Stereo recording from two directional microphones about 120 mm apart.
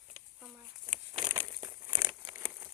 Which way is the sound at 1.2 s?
30° right (ahead or behind).